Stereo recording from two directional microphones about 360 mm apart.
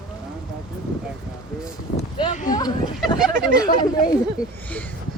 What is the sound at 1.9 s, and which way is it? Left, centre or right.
Speech, centre.